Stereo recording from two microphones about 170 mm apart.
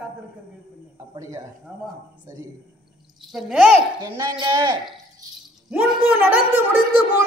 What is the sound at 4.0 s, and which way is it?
Speech, 25° right (ahead or behind).